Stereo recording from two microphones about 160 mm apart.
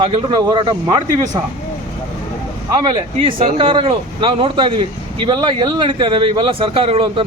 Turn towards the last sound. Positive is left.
turn(degrees=-35)  # may be behind; listen again after turning